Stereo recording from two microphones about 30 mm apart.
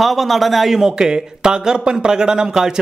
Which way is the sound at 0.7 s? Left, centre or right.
Centre.